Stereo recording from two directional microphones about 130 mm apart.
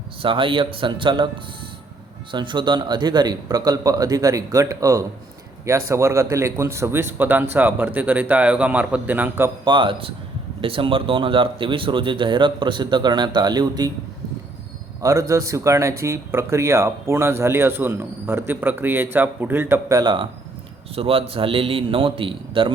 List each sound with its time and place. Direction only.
0.2 s speech: 40° right (ahead or behind)
2.3 s a man's voice: 40° right (ahead or behind); by 9.5 s 15° right (ahead or behind)
9.6 s speech: 40° right (ahead or behind)
15.0 s speech: 25° right (ahead or behind)
20.0 s speech: 35° right (ahead or behind)
20.9 s a man's voice: 45° right (ahead or behind)